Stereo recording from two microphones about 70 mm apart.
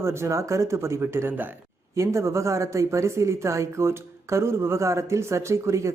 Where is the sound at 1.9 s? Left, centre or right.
Right.